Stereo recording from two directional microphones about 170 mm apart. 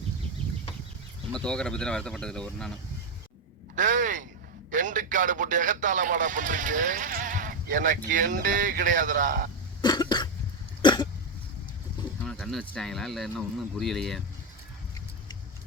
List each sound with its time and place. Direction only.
1.3 s speech: 5° left (ahead or behind)
3.8 s a sound: 50° right (ahead or behind)
4.7 s speech: 50° right (ahead or behind)
9.8 s cough: 25° left (ahead or behind)
10.8 s throat clearing: 25° left (ahead or behind)
12.2 s speech: 5° left (ahead or behind)